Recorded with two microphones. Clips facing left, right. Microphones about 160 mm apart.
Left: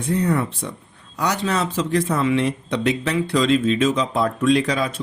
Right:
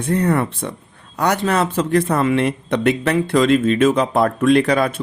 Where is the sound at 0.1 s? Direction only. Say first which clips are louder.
Right 3 dB; 60° right (ahead or behind).